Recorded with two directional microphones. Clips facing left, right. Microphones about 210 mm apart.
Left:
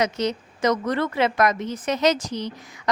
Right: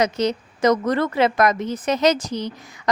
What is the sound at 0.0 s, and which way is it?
A woman's voice, 40° right (ahead or behind).